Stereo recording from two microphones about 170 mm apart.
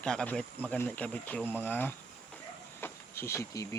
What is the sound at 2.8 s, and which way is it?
Insect, 15° left (ahead or behind).